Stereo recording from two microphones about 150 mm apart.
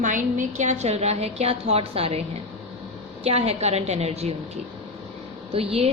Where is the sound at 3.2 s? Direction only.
45° right (ahead or behind).